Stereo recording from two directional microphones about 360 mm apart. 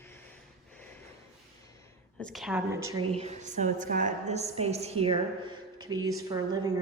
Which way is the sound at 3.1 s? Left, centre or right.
Centre.